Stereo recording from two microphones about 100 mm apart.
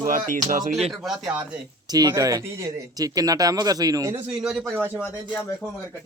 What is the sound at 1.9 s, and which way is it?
Speech, 35° right (ahead or behind).